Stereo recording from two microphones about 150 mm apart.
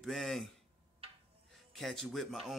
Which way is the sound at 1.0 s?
40° right (ahead or behind).